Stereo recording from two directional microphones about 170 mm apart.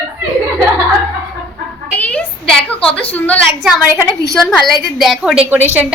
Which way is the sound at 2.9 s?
10° left (ahead or behind).